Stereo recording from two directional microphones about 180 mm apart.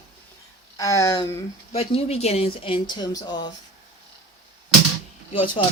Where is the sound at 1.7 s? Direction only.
35° left (ahead or behind).